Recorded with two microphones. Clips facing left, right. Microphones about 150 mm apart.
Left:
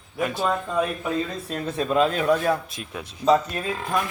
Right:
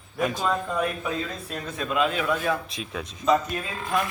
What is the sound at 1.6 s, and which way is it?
Speech, 35° left (ahead or behind).